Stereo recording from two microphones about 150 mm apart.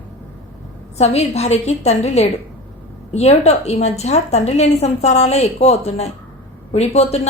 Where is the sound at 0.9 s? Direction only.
45° left (ahead or behind).